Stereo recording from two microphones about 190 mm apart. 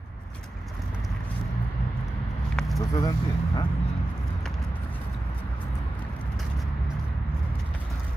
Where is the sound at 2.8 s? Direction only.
20° left (ahead or behind).